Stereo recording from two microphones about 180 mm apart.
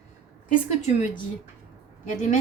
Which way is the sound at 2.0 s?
45° left (ahead or behind).